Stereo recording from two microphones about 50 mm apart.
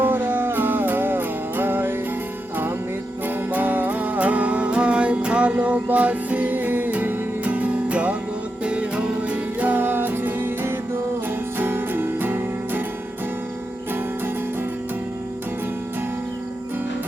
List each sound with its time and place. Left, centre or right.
0.0 s music: right
3.5 s music: right